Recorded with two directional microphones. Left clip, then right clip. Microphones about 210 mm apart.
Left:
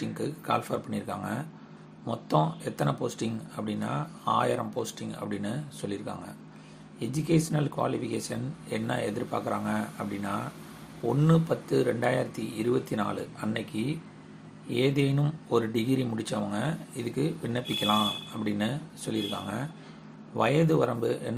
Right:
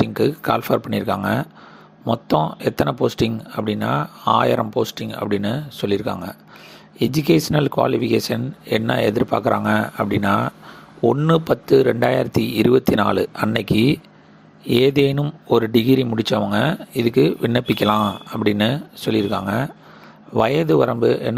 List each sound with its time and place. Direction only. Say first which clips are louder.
0.1 s speech: right 11 dB; 40° right (ahead or behind)